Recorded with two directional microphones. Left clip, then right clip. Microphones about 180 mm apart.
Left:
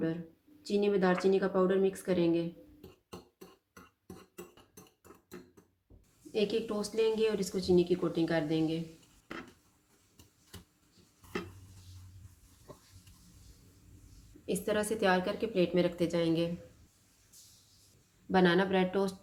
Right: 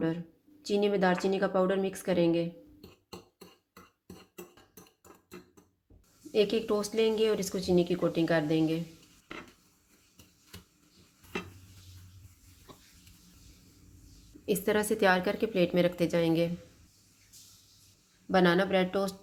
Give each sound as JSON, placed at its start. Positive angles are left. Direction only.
{"t": 0.6, "sound": "speech", "side_deg": -45}
{"t": 6.3, "sound": "speech", "side_deg": -45}
{"t": 14.4, "sound": "speech", "side_deg": -40}
{"t": 18.3, "sound": "speech", "side_deg": -30}